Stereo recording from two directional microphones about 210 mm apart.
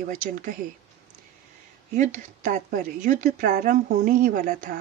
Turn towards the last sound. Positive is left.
turn(degrees=-40)  # may be behind; listen again after turning